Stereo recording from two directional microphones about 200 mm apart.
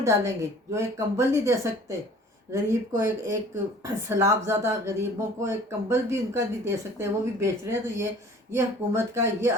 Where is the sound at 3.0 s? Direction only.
15° right (ahead or behind).